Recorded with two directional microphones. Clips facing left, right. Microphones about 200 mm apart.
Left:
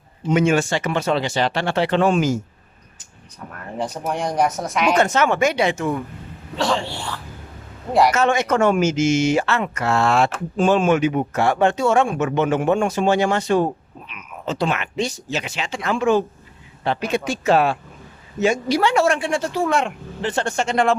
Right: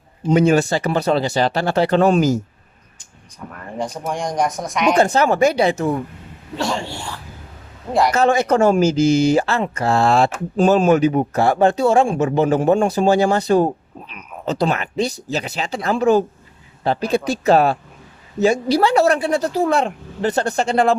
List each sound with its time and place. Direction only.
0.3 s speech: 35° right (ahead or behind)
3.8 s speech: 5° left (ahead or behind)
4.9 s speech: 35° right (ahead or behind)
8.1 s speech: 35° right (ahead or behind)